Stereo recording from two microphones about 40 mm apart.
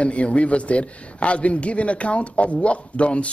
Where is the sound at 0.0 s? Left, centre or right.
Left.